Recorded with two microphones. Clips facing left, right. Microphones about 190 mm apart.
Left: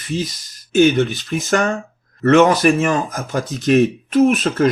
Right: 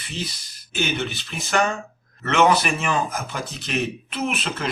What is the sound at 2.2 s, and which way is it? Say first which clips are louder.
A man's voice: left 7 dB; 40° left (ahead or behind).